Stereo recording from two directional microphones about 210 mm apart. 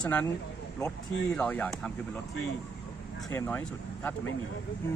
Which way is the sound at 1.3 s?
5° left (ahead or behind).